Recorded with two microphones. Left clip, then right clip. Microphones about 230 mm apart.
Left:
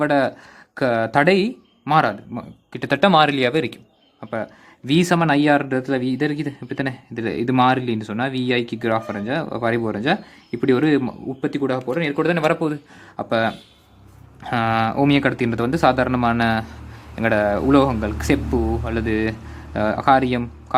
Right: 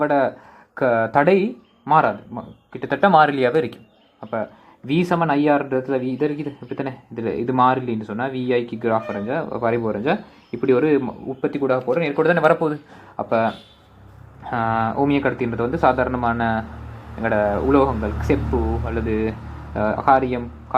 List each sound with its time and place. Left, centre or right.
0.0 s speech: left
4.2 s speech: left
13.1 s speech: left